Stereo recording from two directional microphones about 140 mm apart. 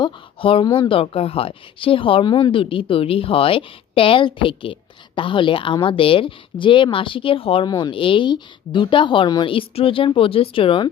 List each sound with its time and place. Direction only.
0.0 s a woman's voice: 40° left (ahead or behind)